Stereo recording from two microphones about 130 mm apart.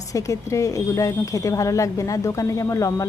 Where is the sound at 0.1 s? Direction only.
25° left (ahead or behind).